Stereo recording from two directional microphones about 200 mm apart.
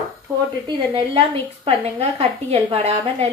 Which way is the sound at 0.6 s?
25° right (ahead or behind).